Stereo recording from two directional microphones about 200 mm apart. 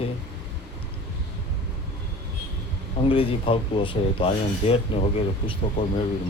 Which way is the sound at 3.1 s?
25° left (ahead or behind).